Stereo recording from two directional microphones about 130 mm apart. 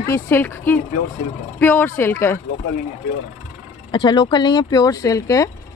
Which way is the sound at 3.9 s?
35° left (ahead or behind).